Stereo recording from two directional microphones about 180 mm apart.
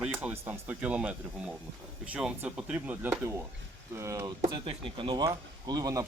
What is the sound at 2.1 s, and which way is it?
Speech, 5° right (ahead or behind).